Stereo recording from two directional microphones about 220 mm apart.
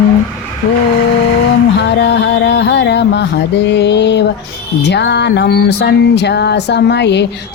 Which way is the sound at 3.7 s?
50° left (ahead or behind).